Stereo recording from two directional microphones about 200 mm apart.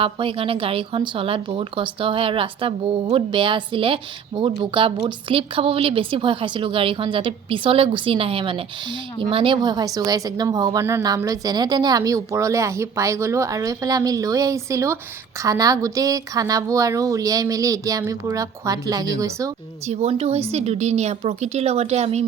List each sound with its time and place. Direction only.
0.0 s a woman's voice: 25° right (ahead or behind)
19.9 s a woman's voice: 30° right (ahead or behind)